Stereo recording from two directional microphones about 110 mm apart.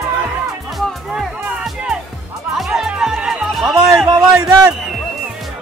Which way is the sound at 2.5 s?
5° right (ahead or behind).